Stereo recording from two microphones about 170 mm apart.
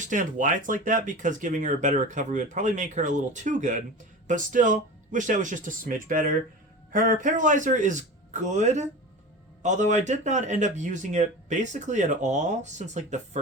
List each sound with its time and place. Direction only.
0.0 s speech: 50° right (ahead or behind)